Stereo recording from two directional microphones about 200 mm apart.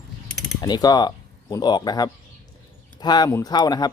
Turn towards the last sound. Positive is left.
turn(degrees=20)  # may be behind; listen again after turning